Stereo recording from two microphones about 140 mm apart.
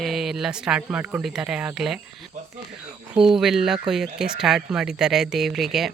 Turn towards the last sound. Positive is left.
turn(degrees=0)  # may be behind; listen again after turning